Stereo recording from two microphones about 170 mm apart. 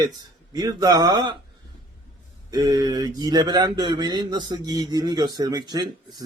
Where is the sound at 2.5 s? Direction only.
20° right (ahead or behind).